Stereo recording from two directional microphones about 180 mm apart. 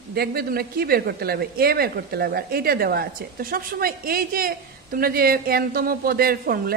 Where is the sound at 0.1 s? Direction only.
60° right (ahead or behind).